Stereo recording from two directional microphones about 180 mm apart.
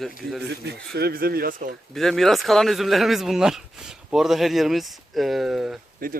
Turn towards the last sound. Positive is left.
turn(degrees=-50)  # may be behind; listen again after turning